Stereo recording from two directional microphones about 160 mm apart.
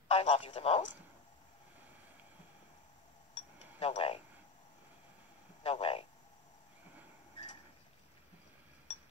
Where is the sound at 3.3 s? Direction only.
40° left (ahead or behind).